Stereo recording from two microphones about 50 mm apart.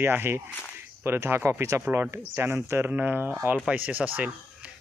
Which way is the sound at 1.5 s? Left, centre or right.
Right.